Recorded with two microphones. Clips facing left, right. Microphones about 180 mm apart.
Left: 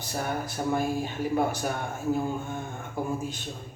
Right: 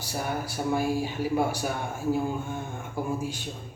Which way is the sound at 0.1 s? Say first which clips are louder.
Even; 10° right (ahead or behind).